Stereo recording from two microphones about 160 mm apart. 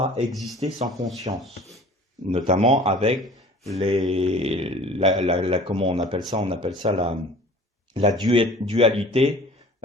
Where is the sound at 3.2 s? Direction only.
Centre (ahead or behind).